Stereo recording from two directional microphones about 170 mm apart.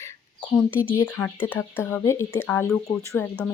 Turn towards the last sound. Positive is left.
turn(degrees=10)  # may be behind; listen again after turning